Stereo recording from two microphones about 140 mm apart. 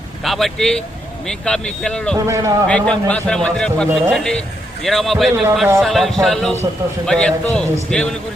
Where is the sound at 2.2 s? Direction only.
20° right (ahead or behind).